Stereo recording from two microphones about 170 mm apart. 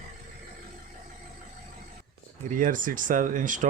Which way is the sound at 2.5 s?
50° right (ahead or behind).